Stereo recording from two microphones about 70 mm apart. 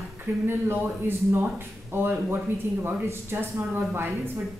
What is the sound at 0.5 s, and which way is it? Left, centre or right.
Speech, right.